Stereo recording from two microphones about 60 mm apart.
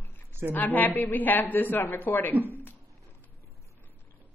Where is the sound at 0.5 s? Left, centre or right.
Left.